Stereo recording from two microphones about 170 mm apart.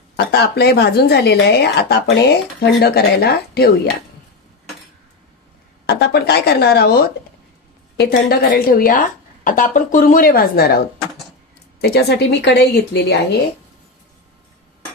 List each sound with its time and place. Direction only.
0.1 s a woman's voice: 70° left (ahead or behind)
5.9 s a woman's voice: 70° left (ahead or behind)
11.8 s a woman's voice: 70° left (ahead or behind)